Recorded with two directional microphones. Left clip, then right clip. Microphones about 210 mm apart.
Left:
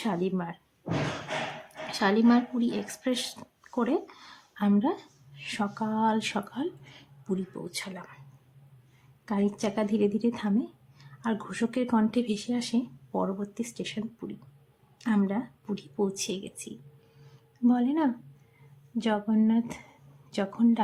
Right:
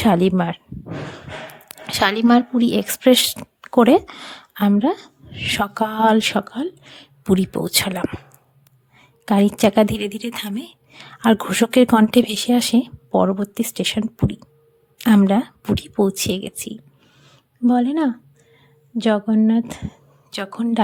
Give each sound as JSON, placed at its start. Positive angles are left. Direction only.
{"t": 0.0, "sound": "a woman's voice", "side_deg": -45}
{"t": 1.9, "sound": "speech", "side_deg": -40}
{"t": 9.2, "sound": "a woman's voice", "side_deg": -45}
{"t": 17.2, "sound": "a sound", "side_deg": -35}
{"t": 18.9, "sound": "speech", "side_deg": -35}